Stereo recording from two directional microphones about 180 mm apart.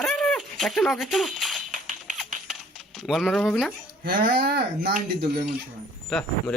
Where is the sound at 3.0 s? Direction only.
Centre (ahead or behind).